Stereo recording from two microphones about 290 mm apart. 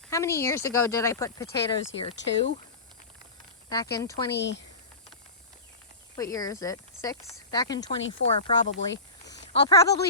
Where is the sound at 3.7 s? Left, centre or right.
Centre.